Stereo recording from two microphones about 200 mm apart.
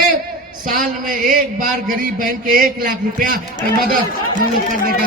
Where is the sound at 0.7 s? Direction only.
45° right (ahead or behind).